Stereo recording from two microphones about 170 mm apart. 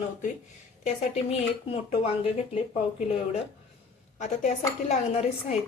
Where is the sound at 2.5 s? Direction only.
35° left (ahead or behind).